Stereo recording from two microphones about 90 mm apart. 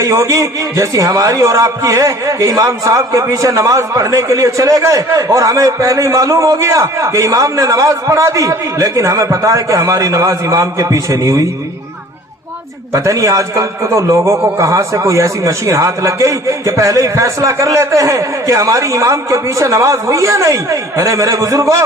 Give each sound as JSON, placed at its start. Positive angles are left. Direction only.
{"t": 0.0, "sound": "a man's voice", "side_deg": -35}
{"t": 12.9, "sound": "a man's voice", "side_deg": -35}